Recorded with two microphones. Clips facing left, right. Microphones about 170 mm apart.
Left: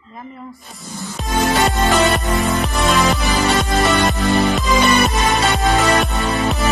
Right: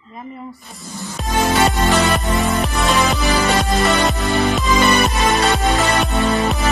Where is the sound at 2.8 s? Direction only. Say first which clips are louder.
Left 2 dB; centre (ahead or behind).